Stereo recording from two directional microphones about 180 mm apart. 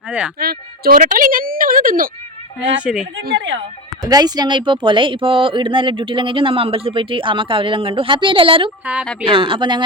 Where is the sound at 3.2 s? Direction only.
70° right (ahead or behind).